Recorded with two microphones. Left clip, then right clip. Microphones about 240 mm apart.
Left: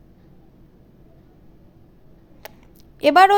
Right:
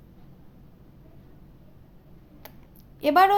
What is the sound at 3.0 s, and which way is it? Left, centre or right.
Speech, left.